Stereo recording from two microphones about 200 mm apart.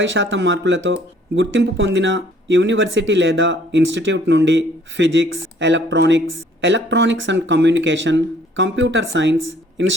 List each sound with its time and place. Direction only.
0.0 s speech: 65° right (ahead or behind)